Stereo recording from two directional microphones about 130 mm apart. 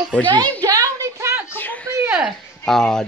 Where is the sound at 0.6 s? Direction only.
25° right (ahead or behind).